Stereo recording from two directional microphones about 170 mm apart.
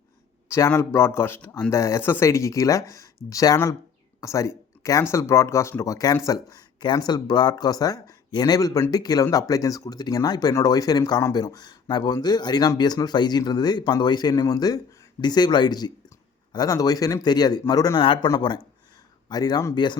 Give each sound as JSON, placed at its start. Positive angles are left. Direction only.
{"t": 0.4, "sound": "speech", "side_deg": 15}